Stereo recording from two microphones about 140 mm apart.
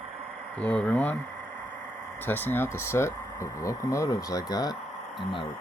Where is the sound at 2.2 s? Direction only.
15° left (ahead or behind).